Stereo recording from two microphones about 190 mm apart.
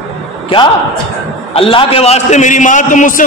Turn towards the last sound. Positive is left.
turn(degrees=45)  # may be behind; listen again after turning